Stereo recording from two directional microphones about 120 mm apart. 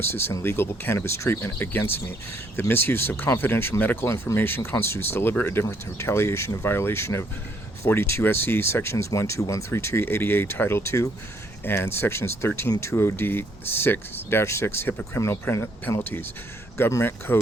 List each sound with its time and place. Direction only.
0.0 s speech: 20° left (ahead or behind)